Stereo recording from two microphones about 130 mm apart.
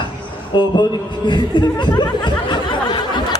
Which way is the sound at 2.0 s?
35° left (ahead or behind).